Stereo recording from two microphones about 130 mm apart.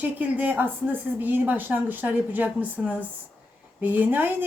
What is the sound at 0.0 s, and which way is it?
Speech, 15° right (ahead or behind).